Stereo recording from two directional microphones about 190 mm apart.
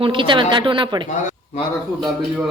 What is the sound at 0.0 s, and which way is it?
Speech, 25° right (ahead or behind).